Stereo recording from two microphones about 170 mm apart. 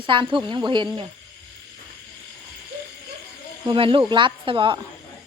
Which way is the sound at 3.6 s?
30° right (ahead or behind).